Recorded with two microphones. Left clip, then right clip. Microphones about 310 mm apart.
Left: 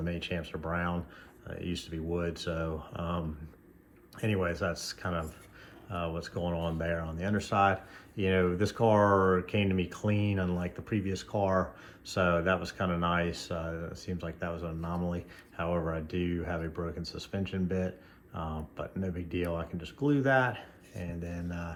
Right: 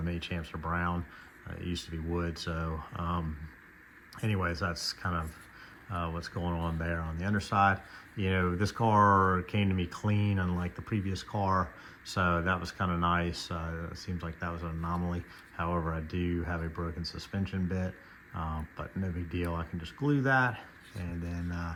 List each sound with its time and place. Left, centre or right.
0.0 s speech: right